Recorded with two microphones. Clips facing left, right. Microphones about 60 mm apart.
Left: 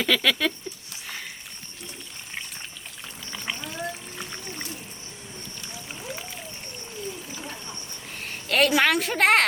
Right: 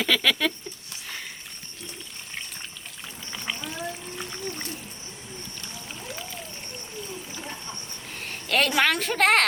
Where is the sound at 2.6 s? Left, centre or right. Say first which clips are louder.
Even; centre.